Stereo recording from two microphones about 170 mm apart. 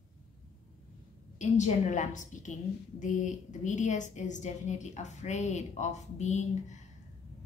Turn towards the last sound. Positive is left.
turn(degrees=45)  # may be behind; listen again after turning